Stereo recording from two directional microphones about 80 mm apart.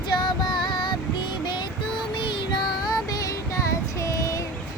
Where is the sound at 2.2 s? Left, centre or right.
Left.